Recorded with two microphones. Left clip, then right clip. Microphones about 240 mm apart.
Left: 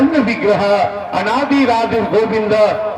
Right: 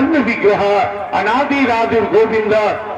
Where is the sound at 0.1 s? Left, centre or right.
Right.